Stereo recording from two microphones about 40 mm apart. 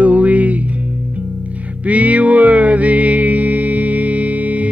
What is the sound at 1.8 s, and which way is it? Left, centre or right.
Music, right.